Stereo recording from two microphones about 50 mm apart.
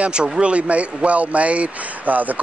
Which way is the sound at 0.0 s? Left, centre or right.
Centre.